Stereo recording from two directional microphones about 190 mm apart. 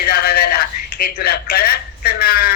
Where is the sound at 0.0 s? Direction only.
55° left (ahead or behind).